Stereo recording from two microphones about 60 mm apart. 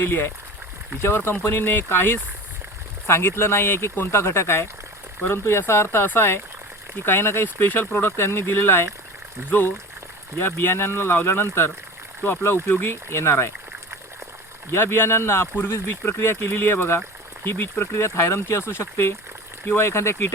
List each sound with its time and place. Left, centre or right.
0.0 s speech: left
14.7 s speech: left